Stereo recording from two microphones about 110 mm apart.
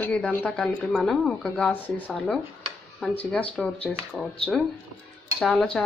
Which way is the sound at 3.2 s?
15° left (ahead or behind).